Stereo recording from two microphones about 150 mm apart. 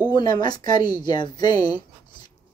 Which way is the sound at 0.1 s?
30° left (ahead or behind).